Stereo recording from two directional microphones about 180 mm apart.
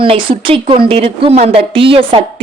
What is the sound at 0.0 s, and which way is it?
A woman's voice, 30° right (ahead or behind).